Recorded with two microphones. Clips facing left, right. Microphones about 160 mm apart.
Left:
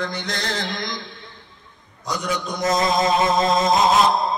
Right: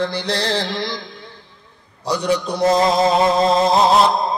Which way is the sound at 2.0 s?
30° right (ahead or behind).